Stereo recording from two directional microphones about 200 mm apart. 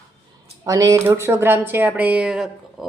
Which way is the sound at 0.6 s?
15° right (ahead or behind).